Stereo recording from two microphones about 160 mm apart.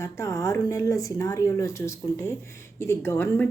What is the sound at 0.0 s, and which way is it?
A woman's voice, 20° left (ahead or behind).